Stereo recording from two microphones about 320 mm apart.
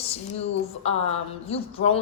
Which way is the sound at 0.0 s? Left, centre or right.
Centre.